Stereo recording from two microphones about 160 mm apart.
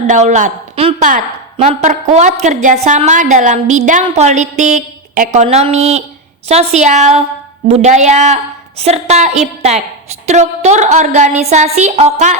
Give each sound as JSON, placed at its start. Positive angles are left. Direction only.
{"t": 0.1, "sound": "a woman's voice", "side_deg": -50}